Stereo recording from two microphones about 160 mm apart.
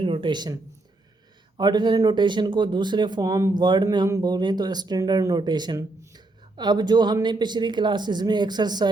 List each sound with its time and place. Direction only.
0.0 s speech: 35° right (ahead or behind)